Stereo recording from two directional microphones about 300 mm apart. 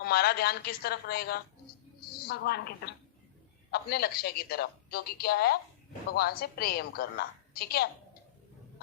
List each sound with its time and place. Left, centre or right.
0.0 s a woman's voice: left